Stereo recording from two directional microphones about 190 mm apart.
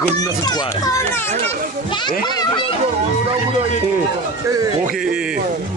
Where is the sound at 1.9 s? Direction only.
25° left (ahead or behind).